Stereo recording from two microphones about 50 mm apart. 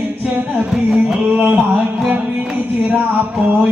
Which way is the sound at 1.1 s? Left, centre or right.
Right.